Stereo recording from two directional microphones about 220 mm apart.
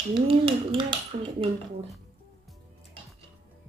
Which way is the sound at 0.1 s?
25° right (ahead or behind).